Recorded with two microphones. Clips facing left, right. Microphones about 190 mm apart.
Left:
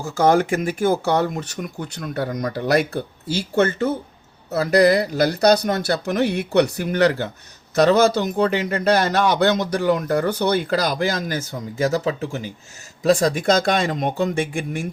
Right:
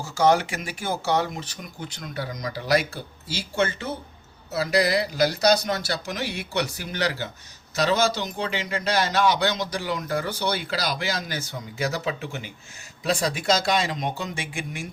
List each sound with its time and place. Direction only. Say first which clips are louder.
0.0 s speech: left 4 dB; 55° left (ahead or behind)